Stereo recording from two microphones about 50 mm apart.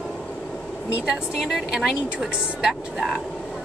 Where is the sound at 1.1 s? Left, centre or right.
Centre.